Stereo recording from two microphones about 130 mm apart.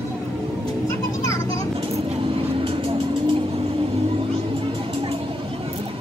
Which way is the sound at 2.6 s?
45° right (ahead or behind).